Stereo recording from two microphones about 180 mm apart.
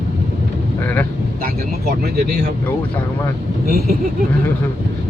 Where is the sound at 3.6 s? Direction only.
60° right (ahead or behind).